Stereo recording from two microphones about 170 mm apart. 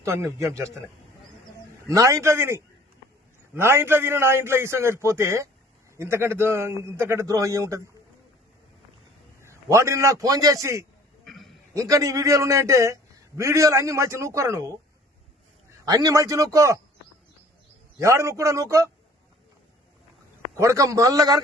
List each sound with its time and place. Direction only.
0.0 s a man's voice: 15° right (ahead or behind)
1.9 s a man's voice: 20° right (ahead or behind)
9.4 s a man's voice: 15° right (ahead or behind)
11.3 s a sound: centre (ahead or behind)
11.7 s a man's voice: 20° right (ahead or behind)
15.8 s a man's voice: 20° right (ahead or behind)
18.0 s a man's voice: 15° right (ahead or behind)
20.6 s a man's voice: 20° right (ahead or behind)